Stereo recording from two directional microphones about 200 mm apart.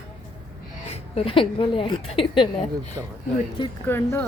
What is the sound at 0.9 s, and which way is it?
A woman's voice, 30° left (ahead or behind).